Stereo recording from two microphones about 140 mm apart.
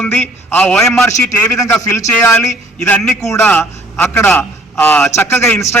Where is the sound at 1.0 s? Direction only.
20° left (ahead or behind).